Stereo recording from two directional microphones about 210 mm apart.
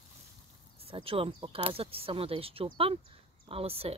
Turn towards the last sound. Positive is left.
turn(degrees=-30)  # may be behind; listen again after turning